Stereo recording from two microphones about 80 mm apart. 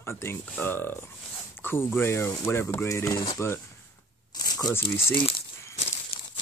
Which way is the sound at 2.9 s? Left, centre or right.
Left.